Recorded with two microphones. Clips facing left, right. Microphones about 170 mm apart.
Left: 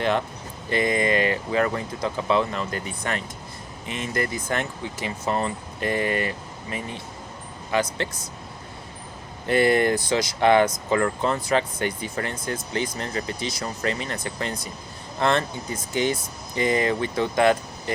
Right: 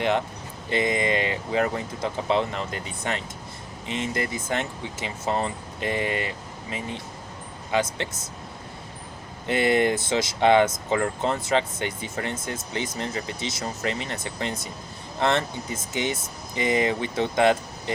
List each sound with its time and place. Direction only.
0.7 s speech: 20° right (ahead or behind)
9.5 s speech: 20° right (ahead or behind)